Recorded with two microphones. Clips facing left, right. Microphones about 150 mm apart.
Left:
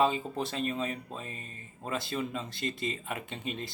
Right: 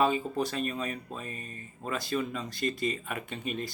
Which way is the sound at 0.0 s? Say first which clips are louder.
Right 1 dB; 25° left (ahead or behind).